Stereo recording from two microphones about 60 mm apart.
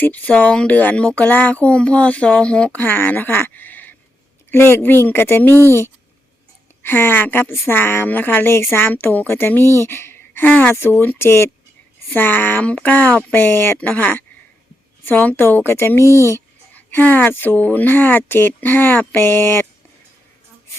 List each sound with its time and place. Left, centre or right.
0.0 s speech: left
11.2 s speech: left
12.0 s speech: left
13.4 s speech: left
13.7 s speech: left
16.7 s speech: left